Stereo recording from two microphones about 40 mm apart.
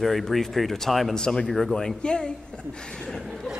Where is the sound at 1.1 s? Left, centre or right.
Centre.